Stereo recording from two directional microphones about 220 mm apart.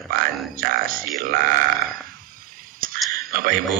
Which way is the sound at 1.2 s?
40° right (ahead or behind).